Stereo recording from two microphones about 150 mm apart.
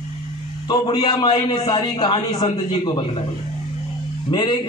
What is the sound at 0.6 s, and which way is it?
A man's voice, 30° left (ahead or behind).